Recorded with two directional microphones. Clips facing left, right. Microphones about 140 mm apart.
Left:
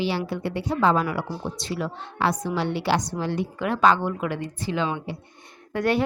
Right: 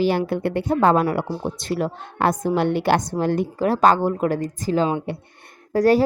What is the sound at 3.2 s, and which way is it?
A woman's voice, 50° right (ahead or behind).